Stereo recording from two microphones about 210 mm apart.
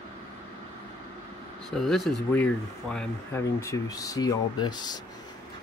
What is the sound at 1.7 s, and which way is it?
Speech, centre (ahead or behind).